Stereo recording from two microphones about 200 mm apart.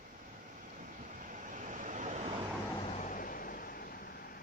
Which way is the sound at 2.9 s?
40° left (ahead or behind).